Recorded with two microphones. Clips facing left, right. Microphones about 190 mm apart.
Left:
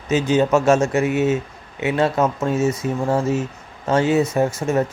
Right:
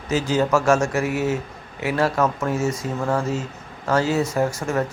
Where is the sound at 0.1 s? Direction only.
20° left (ahead or behind).